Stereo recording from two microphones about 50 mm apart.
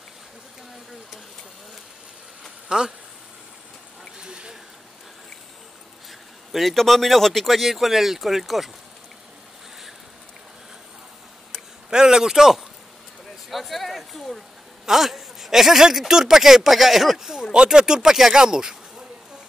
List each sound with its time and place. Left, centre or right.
2.7 s speech: centre
4.2 s a sound: centre
6.5 s speech: centre
11.9 s speech: centre